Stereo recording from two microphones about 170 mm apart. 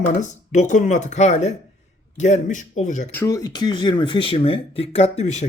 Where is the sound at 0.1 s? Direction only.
45° left (ahead or behind).